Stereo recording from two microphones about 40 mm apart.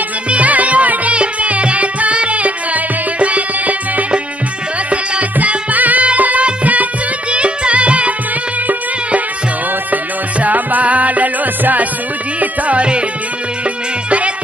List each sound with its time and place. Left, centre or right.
0.3 s music: right
5.4 s music: right
10.4 s music: right